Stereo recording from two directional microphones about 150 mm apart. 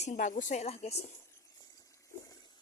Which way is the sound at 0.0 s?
55° left (ahead or behind).